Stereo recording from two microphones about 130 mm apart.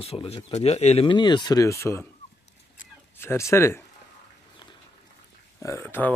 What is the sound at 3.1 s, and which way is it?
Speech, 20° left (ahead or behind).